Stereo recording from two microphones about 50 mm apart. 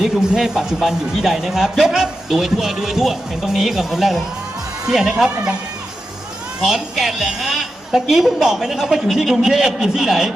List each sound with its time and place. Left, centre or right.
0.0 s speech: centre
6.6 s speech: centre